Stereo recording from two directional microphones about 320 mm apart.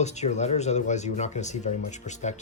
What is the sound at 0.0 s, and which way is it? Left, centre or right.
Speech, left.